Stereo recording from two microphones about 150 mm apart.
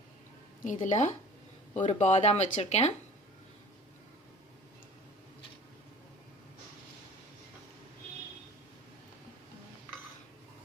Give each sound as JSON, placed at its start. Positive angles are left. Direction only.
{"t": 0.6, "sound": "speech", "side_deg": 55}